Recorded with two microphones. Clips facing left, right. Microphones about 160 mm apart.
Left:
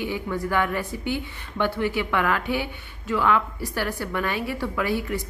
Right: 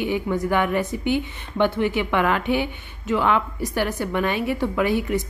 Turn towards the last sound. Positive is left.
turn(degrees=-20)  # may be behind; listen again after turning